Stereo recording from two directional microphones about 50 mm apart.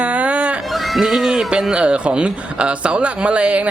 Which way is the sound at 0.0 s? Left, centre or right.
Right.